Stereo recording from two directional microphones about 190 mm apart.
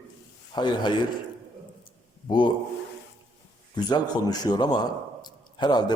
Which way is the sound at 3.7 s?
20° left (ahead or behind).